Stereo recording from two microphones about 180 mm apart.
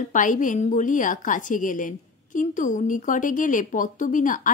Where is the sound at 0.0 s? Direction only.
45° left (ahead or behind).